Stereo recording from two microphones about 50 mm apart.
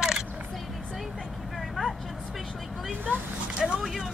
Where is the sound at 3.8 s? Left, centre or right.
Centre.